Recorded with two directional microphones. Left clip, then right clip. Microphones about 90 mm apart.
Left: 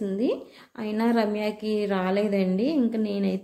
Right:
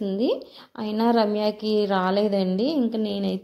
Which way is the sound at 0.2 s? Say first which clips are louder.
Right 4 dB; 30° right (ahead or behind).